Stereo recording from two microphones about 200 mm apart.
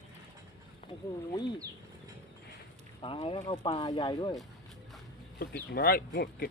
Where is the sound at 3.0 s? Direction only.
25° left (ahead or behind).